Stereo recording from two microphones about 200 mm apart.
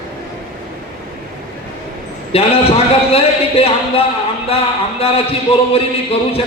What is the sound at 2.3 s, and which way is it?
A man's voice, 30° left (ahead or behind).